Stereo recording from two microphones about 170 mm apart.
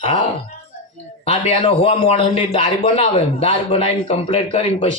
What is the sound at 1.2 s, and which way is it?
A man's voice, 35° left (ahead or behind).